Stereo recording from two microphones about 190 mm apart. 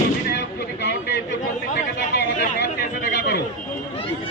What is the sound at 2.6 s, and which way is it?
Chatter, 60° left (ahead or behind).